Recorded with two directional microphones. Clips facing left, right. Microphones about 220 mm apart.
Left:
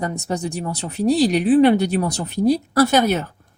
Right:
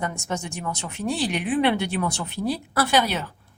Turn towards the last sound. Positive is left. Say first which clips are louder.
# left 6 dB
turn(degrees=45)  # may be behind; listen again after turning